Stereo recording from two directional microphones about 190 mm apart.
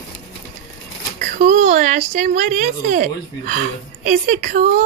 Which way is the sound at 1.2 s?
40° right (ahead or behind).